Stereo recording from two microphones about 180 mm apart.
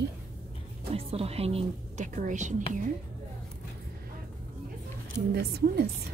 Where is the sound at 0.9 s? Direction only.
35° right (ahead or behind).